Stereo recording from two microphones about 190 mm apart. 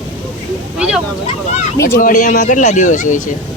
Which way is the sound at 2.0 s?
45° left (ahead or behind).